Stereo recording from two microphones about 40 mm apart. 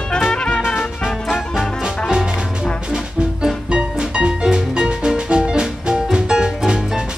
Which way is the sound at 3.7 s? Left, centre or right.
Right.